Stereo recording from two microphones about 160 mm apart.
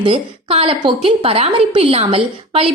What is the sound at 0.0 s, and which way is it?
A woman's voice, 35° right (ahead or behind).